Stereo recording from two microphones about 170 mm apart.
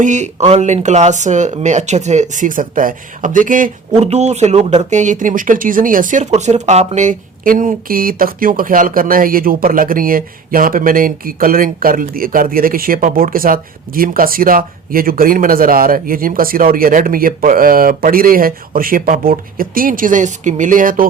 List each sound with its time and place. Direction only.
0.0 s speech: 45° right (ahead or behind)